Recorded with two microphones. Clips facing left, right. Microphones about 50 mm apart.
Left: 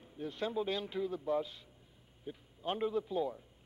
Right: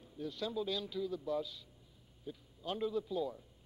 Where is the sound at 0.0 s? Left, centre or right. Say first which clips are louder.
Left 2 dB; left.